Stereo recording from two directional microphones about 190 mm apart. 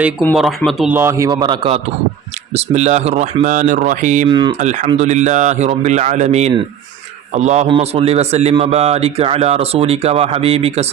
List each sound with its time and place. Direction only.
0.3 s speech: centre (ahead or behind)
0.9 s a man's voice: 15° right (ahead or behind); by 4.3 s 40° right (ahead or behind)
4.3 s a man's voice: 25° right (ahead or behind)
4.5 s a man's voice: 40° right (ahead or behind)